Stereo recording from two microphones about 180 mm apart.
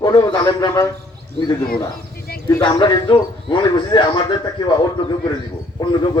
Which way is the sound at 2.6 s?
25° left (ahead or behind).